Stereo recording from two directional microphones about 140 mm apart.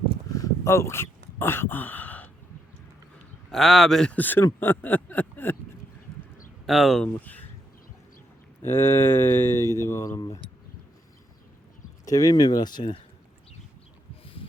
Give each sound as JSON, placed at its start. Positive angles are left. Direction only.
{"t": 0.3, "sound": "a sound", "side_deg": 20}
{"t": 3.5, "sound": "speech", "side_deg": 0}
{"t": 6.7, "sound": "speech", "side_deg": 0}
{"t": 8.6, "sound": "speech", "side_deg": 15}
{"t": 12.0, "sound": "speech", "side_deg": 25}